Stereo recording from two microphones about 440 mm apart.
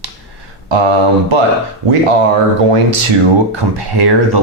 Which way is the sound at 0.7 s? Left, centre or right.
Right.